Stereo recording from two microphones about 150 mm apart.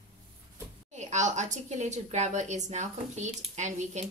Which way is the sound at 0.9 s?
50° right (ahead or behind).